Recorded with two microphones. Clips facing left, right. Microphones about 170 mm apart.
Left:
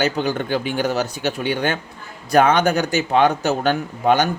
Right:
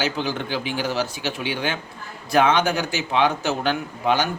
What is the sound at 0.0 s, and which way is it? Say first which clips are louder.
A man's voice: left 4 dB; 45° left (ahead or behind).